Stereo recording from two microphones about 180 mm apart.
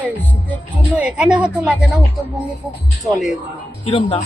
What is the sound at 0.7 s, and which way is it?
Speech, 5° right (ahead or behind).